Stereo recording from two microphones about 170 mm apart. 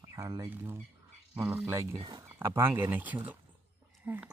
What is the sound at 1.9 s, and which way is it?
Speech, 30° right (ahead or behind).